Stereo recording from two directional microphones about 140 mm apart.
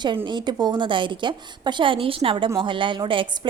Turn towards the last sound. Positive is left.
turn(degrees=-35)  # may be behind; listen again after turning